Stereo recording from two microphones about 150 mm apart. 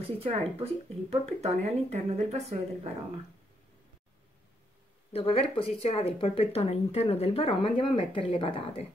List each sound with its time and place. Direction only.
0.2 s speech: 40° right (ahead or behind)
5.1 s speech: 40° left (ahead or behind)